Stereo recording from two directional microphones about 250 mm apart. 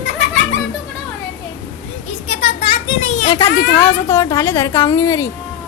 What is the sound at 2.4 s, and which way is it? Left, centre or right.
Children playing, left.